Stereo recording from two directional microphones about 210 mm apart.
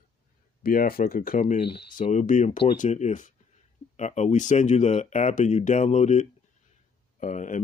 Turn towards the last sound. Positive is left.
turn(degrees=35)  # may be behind; listen again after turning